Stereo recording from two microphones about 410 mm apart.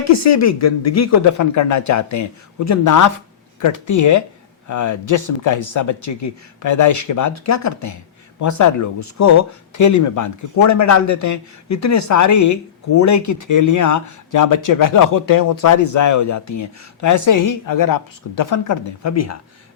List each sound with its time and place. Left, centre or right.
0.0 s speech: left